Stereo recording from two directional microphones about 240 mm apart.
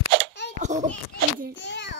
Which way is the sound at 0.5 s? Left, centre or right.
Right.